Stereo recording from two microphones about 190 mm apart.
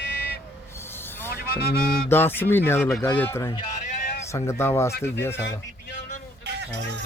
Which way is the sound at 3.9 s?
35° left (ahead or behind).